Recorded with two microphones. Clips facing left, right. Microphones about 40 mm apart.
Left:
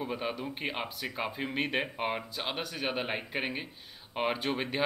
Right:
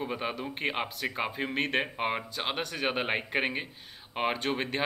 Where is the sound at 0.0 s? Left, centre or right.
Centre.